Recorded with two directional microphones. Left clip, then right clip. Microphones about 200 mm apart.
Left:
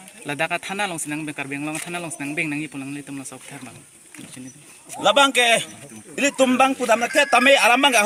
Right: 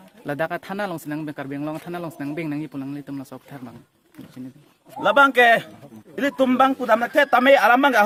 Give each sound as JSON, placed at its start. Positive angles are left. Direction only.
{"t": 0.3, "sound": "speech", "side_deg": -45}
{"t": 4.9, "sound": "a man's voice", "side_deg": -5}